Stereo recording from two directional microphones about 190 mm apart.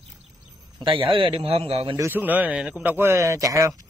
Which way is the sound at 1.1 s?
30° right (ahead or behind).